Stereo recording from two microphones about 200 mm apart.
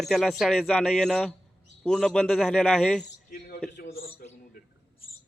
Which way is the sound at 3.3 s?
50° left (ahead or behind).